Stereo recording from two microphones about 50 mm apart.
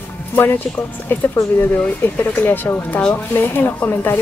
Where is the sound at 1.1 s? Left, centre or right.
Left.